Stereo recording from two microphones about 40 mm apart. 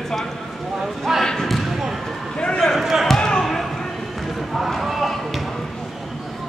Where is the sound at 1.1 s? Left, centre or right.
Centre.